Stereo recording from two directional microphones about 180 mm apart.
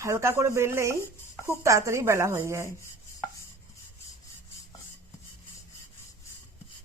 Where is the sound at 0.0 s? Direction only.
15° right (ahead or behind).